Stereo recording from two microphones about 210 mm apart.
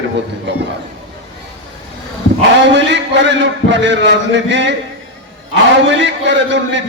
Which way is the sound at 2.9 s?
60° right (ahead or behind).